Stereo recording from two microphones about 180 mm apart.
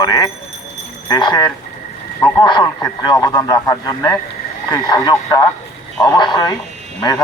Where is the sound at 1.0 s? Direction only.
25° left (ahead or behind).